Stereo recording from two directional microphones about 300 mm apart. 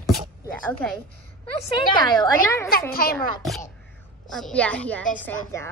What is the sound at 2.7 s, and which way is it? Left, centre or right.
Speech, left.